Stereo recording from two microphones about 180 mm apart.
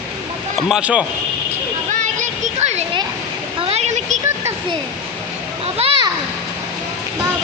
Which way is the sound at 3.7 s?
40° right (ahead or behind).